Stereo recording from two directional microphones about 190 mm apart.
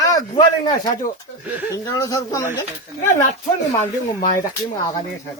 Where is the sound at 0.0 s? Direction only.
20° left (ahead or behind).